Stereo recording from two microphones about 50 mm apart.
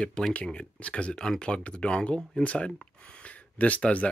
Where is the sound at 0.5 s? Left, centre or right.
Left.